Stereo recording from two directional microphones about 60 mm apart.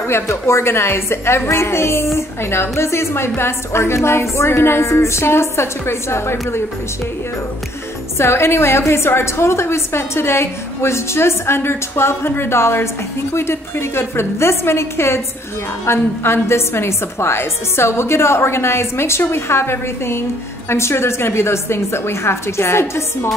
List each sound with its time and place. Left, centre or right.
0.1 s a woman's voice: left
8.2 s a woman's voice: left